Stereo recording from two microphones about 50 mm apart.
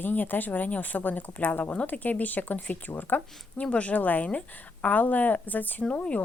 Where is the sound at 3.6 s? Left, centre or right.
Left.